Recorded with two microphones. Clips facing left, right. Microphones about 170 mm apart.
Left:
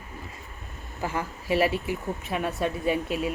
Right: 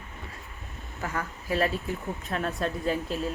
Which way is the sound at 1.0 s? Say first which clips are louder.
Left 3 dB; 25° left (ahead or behind).